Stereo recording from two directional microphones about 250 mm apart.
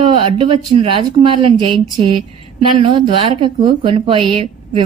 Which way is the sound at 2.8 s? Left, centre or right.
Right.